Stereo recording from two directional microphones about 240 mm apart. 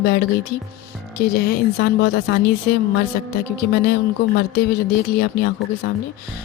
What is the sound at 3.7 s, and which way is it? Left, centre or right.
Speech, left.